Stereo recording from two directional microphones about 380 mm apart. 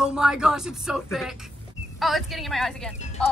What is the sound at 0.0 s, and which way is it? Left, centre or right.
Speech, centre.